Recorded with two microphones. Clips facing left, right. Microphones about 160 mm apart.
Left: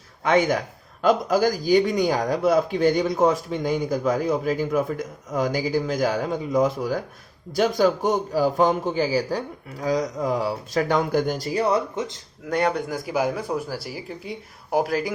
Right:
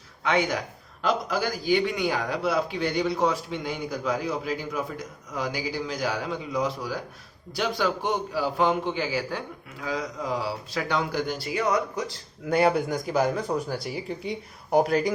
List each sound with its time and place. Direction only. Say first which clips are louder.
0.2 s a man's voice: left 5 dB; 45° left (ahead or behind); by 12.2 s 20° left (ahead or behind)
12.5 s speech: right 1 dB; 5° right (ahead or behind)